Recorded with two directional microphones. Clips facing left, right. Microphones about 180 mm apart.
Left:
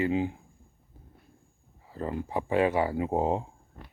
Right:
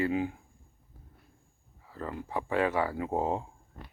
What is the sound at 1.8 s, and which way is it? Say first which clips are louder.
Speech: left 5 dB; 25° left (ahead or behind).